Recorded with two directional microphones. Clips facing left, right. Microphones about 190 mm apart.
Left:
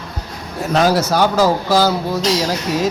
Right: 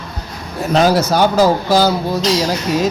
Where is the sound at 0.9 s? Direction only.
20° right (ahead or behind).